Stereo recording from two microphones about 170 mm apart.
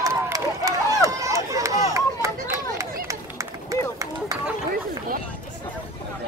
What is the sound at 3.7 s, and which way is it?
Run, 20° right (ahead or behind).